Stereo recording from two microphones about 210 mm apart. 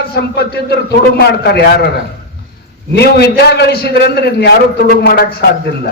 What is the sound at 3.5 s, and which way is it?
A man's voice, 50° left (ahead or behind).